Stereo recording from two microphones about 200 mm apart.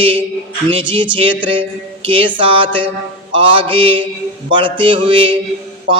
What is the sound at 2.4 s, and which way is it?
Speech, 25° right (ahead or behind).